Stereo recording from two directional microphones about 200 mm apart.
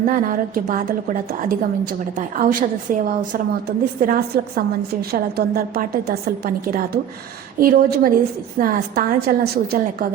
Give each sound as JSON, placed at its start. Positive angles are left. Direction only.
{"t": 0.1, "sound": "a woman's voice", "side_deg": -45}